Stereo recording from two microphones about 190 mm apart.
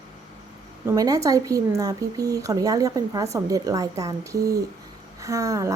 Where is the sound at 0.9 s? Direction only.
20° right (ahead or behind).